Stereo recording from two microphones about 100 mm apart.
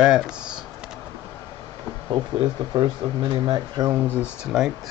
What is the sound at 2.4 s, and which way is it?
A man's voice, 50° right (ahead or behind).